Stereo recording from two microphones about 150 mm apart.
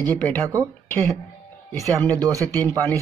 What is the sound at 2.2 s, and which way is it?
Speech, 20° right (ahead or behind).